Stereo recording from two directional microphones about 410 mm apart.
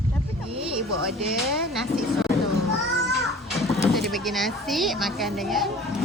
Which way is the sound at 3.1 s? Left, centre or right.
Centre.